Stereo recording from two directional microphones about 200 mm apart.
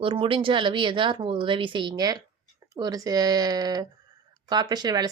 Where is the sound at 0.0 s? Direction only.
25° right (ahead or behind).